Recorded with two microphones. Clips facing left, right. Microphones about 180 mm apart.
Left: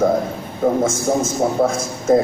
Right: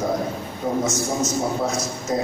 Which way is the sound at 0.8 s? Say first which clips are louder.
Left 5 dB; 50° left (ahead or behind).